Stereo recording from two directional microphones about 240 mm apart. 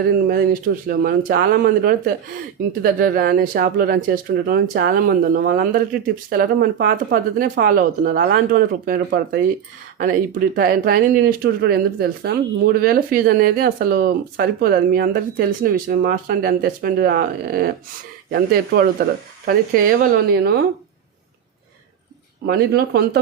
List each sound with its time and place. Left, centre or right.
0.1 s speech: right
22.4 s speech: right